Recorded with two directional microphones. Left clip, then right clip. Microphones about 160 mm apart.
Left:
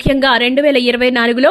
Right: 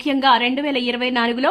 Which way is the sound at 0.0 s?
25° left (ahead or behind).